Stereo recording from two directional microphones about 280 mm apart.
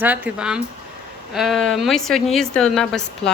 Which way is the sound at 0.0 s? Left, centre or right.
Centre.